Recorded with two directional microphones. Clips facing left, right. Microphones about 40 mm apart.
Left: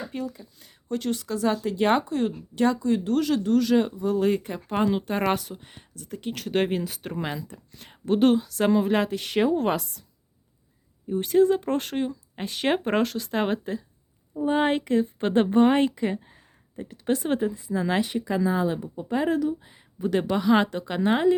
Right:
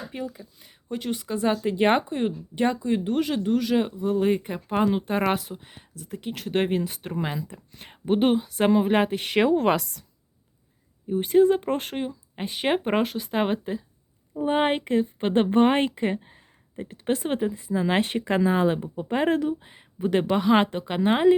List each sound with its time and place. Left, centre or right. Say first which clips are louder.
0.1 s speech: left 1 dB; centre
1.6 s speech: right 2 dB; right
4.8 s a woman's voice: right 1 dB; centre
5.3 s speech: even; right
5.5 s speech: right 1 dB; centre
7.4 s speech: right 2 dB; right
8.0 s a woman's voice: left 1 dB; centre; by 10.0 s right
11.1 s speech: right 1 dB; right
11.9 s speech: left 2 dB; centre
14.4 s speech: even; right
18.0 s a woman's voice: right 2 dB; right